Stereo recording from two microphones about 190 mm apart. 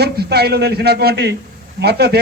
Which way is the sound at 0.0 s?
55° right (ahead or behind).